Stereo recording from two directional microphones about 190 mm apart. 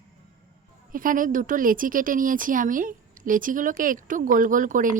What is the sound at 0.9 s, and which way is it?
A woman's voice, 45° right (ahead or behind).